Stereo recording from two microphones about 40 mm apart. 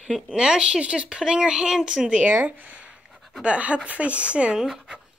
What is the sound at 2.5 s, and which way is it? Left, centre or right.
A woman's voice, right.